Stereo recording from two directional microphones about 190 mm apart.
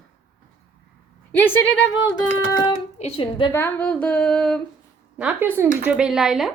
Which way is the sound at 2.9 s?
30° left (ahead or behind).